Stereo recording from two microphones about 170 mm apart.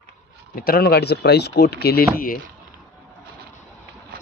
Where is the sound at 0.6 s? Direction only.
65° left (ahead or behind).